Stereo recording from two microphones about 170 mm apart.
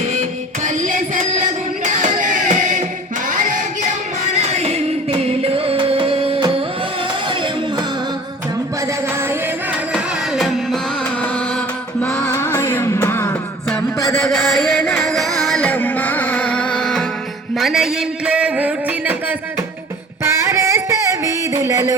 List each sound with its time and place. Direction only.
0.0 s music: 45° right (ahead or behind); by 7.9 s 30° right (ahead or behind)
8.9 s music: 15° right (ahead or behind)
9.9 s music: centre (ahead or behind); by 14.2 s 15° left (ahead or behind)
14.3 s music: centre (ahead or behind)
17.5 s a sound: centre (ahead or behind); by 21.9 s 20° right (ahead or behind)